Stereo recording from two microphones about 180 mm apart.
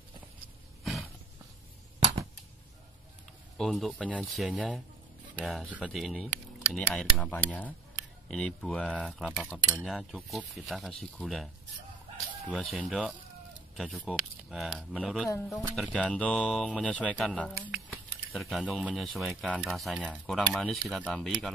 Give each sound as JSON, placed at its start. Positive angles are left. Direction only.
{"t": 3.5, "sound": "speech", "side_deg": 0}
{"t": 17.6, "sound": "speech", "side_deg": -10}